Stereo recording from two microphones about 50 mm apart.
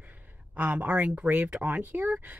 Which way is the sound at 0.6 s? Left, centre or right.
Right.